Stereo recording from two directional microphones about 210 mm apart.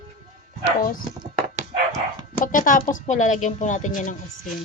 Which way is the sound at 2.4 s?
40° left (ahead or behind).